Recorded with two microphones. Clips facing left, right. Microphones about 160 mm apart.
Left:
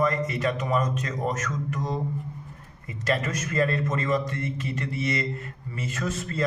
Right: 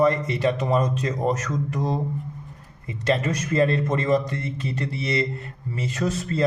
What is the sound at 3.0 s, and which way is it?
A man's voice, 30° right (ahead or behind).